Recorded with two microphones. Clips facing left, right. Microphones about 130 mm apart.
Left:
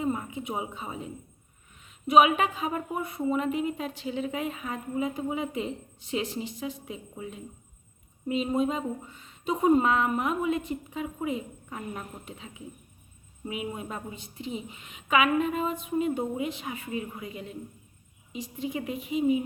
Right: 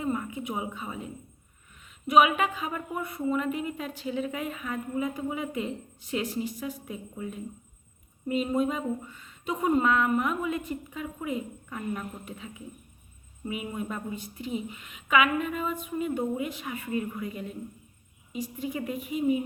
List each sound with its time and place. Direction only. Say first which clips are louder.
0.0 s a woman's voice: even; 25° left (ahead or behind)
8.5 s a woman's voice: even; 25° left (ahead or behind)
18.3 s a woman's voice: even; 25° left (ahead or behind)